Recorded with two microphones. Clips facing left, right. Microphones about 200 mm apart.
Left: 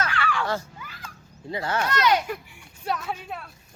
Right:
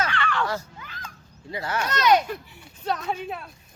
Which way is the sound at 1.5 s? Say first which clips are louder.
Left 2 dB; 30° left (ahead or behind).